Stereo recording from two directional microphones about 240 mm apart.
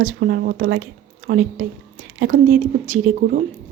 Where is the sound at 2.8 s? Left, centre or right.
Right.